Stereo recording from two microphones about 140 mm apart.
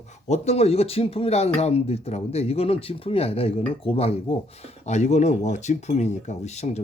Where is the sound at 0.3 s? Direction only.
50° left (ahead or behind).